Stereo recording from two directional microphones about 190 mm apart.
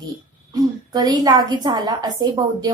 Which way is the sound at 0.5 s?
20° right (ahead or behind).